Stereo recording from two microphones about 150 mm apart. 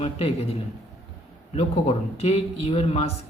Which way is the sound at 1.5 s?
40° left (ahead or behind).